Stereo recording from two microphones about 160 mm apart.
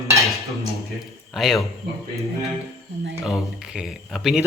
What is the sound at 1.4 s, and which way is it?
Speech, centre (ahead or behind).